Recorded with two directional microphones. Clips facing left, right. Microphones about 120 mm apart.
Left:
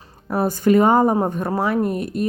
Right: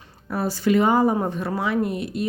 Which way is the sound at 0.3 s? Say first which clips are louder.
Left 4 dB; 45° left (ahead or behind).